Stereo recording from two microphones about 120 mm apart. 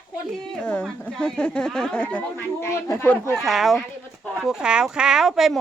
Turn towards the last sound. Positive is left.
turn(degrees=-5)  # may be behind; listen again after turning